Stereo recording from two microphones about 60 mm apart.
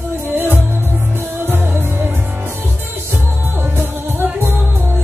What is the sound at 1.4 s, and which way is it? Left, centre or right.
Music, right.